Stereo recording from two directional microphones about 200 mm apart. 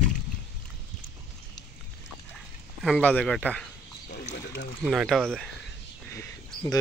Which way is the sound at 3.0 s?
5° left (ahead or behind).